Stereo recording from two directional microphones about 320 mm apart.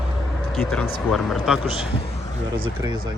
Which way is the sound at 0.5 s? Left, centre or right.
Centre.